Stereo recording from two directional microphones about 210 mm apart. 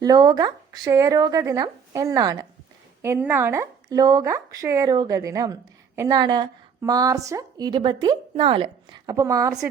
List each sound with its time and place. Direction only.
0.0 s a woman's voice: 20° right (ahead or behind)